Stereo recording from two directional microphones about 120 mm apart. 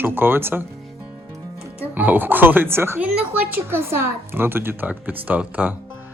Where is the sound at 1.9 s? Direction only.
15° right (ahead or behind).